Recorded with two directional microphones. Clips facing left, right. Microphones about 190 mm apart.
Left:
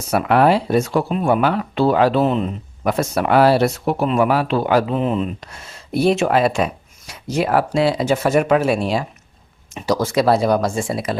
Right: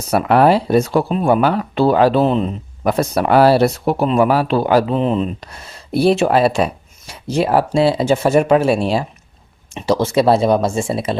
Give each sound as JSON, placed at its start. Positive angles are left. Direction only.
{"t": 0.1, "sound": "speech", "side_deg": -35}